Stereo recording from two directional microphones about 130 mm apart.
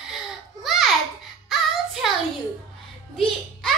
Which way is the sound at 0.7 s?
Centre (ahead or behind).